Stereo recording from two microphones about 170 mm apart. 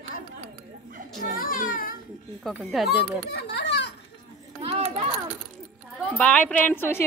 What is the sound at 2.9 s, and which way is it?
A child's voice, 75° left (ahead or behind).